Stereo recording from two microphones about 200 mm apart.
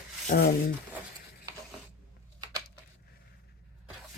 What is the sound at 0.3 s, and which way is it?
Speech, 50° left (ahead or behind).